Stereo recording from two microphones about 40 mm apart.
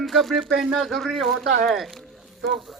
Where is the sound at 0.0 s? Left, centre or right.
Centre.